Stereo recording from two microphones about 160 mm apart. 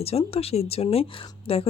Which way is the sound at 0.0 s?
40° left (ahead or behind).